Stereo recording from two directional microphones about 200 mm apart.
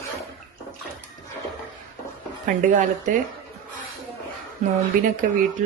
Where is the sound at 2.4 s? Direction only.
40° right (ahead or behind).